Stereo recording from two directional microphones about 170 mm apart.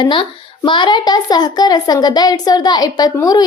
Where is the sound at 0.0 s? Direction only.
30° left (ahead or behind).